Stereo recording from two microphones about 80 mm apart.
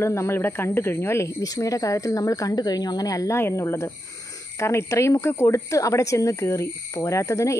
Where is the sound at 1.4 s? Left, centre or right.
Left.